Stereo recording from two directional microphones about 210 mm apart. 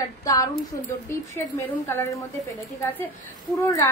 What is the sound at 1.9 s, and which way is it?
Speech, 10° left (ahead or behind).